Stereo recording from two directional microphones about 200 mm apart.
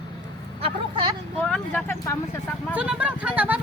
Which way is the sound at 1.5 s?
10° left (ahead or behind).